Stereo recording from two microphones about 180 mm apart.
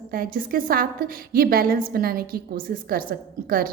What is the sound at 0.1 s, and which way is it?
A woman's voice, 55° right (ahead or behind).